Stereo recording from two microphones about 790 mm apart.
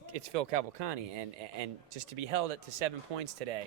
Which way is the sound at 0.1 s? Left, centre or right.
Right.